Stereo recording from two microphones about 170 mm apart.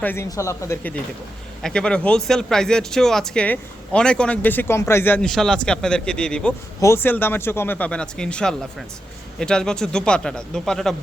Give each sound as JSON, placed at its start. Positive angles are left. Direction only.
{"t": 0.0, "sound": "speech", "side_deg": 10}
{"t": 6.7, "sound": "speech", "side_deg": 15}